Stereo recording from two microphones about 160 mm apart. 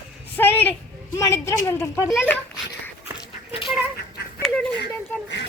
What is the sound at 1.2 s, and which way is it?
Speech, 15° left (ahead or behind).